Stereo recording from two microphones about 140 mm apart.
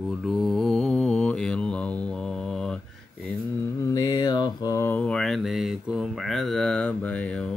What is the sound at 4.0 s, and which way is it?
Mantra, 30° left (ahead or behind).